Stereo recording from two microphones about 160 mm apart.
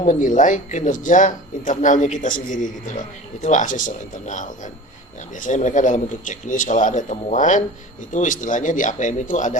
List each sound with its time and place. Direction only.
0.0 s speech: 50° left (ahead or behind)